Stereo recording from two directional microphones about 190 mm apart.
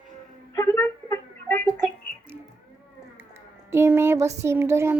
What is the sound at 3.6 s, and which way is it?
A woman's voice, 15° right (ahead or behind).